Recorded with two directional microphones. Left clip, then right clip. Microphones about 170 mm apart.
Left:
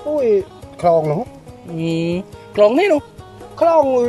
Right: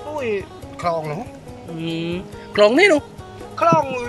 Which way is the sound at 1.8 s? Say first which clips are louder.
Left 6 dB; 20° left (ahead or behind).